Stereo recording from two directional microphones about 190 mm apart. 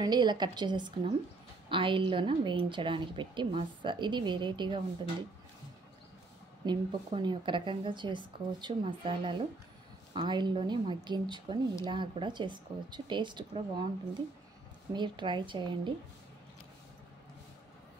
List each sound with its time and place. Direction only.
0.0 s a woman's voice: 20° right (ahead or behind)
6.6 s a woman's voice: 25° right (ahead or behind)
14.9 s a woman's voice: 25° right (ahead or behind)